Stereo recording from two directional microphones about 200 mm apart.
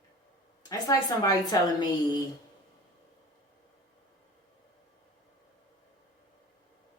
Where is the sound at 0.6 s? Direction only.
20° left (ahead or behind).